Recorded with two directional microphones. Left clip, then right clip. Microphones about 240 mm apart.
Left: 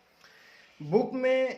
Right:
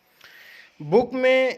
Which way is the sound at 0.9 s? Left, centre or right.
Right.